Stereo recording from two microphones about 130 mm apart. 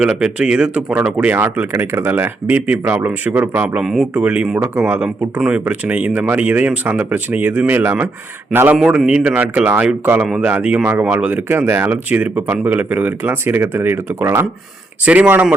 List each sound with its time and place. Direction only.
0.0 s speech: 5° right (ahead or behind)